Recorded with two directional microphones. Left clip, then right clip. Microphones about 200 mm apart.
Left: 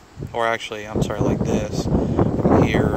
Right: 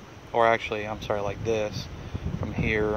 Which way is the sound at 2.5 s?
5° left (ahead or behind).